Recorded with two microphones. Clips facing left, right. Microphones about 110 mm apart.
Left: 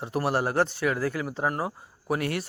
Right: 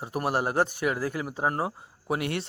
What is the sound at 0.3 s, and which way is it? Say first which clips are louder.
A man's voice: even; 15° right (ahead or behind).